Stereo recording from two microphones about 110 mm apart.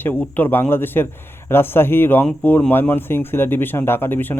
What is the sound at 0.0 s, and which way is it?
Speech, 15° left (ahead or behind).